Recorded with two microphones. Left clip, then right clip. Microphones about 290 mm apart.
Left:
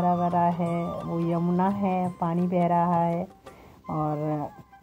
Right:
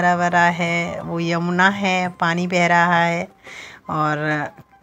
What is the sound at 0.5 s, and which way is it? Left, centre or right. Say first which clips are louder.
Speech: right 8 dB; right.